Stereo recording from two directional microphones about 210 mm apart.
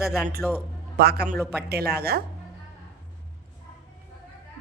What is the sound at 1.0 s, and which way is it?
Speech, 50° right (ahead or behind).